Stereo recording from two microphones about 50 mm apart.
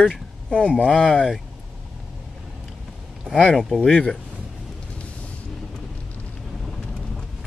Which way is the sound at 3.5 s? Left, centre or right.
Centre.